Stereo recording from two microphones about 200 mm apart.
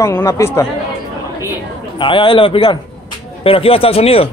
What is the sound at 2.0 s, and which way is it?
A man's voice, 25° left (ahead or behind).